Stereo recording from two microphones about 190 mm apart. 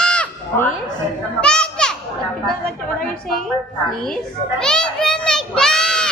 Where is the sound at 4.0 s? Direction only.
5° left (ahead or behind).